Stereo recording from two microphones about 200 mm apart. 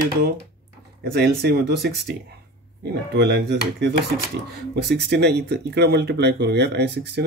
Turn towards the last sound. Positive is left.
turn(degrees=-55)  # may be behind; listen again after turning